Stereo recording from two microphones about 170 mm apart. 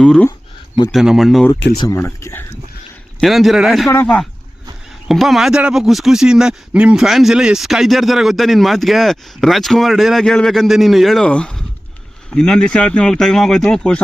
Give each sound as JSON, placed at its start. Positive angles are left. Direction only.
{"t": 0.0, "sound": "speech", "side_deg": 5}
{"t": 1.5, "sound": "speech", "side_deg": 90}
{"t": 1.8, "sound": "speech", "side_deg": 15}
{"t": 3.2, "sound": "speech", "side_deg": 0}
{"t": 3.8, "sound": "speech", "side_deg": 10}